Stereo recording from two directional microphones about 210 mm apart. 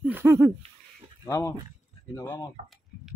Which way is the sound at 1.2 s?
15° left (ahead or behind).